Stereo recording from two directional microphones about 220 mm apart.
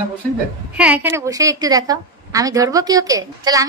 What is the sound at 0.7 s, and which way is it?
A woman's voice, 5° right (ahead or behind).